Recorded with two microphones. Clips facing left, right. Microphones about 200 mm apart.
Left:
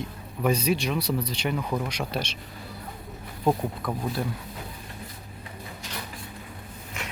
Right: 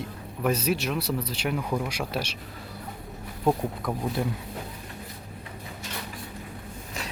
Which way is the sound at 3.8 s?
10° right (ahead or behind).